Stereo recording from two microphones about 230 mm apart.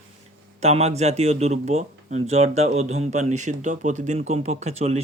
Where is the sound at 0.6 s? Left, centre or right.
Right.